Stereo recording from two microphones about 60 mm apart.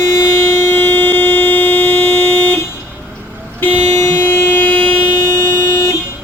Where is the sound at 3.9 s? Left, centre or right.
Left.